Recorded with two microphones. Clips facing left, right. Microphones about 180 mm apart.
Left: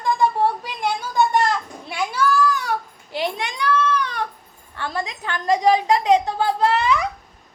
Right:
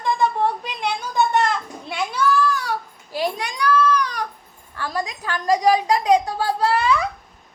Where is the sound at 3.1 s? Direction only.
25° left (ahead or behind).